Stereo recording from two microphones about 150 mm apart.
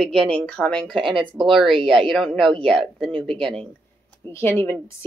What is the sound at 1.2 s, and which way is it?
Speech, 35° right (ahead or behind).